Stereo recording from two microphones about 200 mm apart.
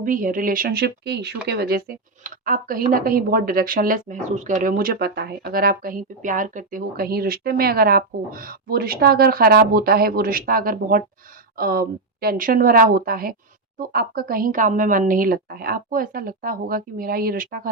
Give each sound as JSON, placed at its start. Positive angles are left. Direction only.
{"t": 0.0, "sound": "speech", "side_deg": -45}